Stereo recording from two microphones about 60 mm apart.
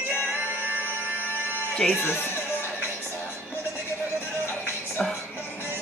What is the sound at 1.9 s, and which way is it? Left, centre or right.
Speech, left.